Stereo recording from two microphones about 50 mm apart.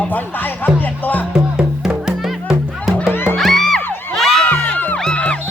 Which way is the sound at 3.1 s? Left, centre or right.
Left.